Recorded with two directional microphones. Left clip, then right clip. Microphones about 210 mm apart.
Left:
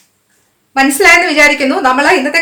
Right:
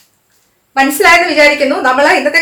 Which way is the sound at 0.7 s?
30° left (ahead or behind).